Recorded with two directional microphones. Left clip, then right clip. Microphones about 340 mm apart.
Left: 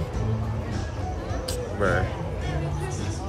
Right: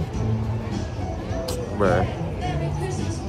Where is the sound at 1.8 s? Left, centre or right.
Centre.